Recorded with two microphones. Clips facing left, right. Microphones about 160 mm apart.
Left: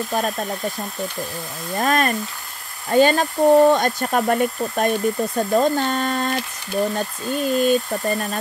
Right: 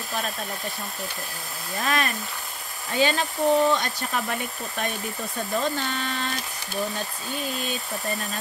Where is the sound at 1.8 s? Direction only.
45° left (ahead or behind).